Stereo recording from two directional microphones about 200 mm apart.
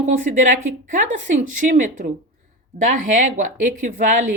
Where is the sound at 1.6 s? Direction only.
40° right (ahead or behind).